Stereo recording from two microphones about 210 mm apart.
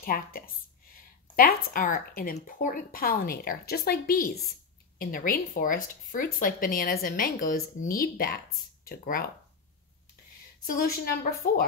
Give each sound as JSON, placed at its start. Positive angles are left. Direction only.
{"t": 0.0, "sound": "speech", "side_deg": 45}
{"t": 0.9, "sound": "a sound", "side_deg": 40}
{"t": 1.7, "sound": "speech", "side_deg": 40}
{"t": 10.8, "sound": "speech", "side_deg": 45}